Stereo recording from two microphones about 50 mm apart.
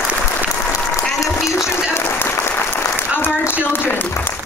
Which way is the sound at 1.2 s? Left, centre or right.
Left.